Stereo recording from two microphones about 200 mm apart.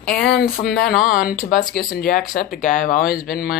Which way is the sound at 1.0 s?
40° left (ahead or behind).